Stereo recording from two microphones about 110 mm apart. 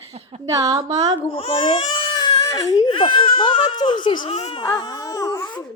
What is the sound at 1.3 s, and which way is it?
Speech, 55° left (ahead or behind).